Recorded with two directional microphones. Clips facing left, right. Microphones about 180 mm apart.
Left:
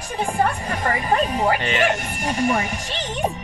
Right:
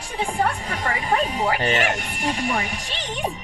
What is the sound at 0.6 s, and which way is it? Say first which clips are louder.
Speech: left 3 dB; 50° left (ahead or behind).